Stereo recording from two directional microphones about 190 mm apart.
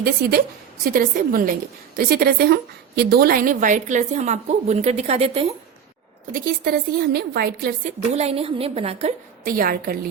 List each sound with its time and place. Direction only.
0.0 s a woman's voice: 55° right (ahead or behind); by 5.5 s 30° right (ahead or behind)
6.3 s a woman's voice: 50° right (ahead or behind)
8.1 s a woman's voice: 35° right (ahead or behind)
9.4 s a woman's voice: 45° right (ahead or behind)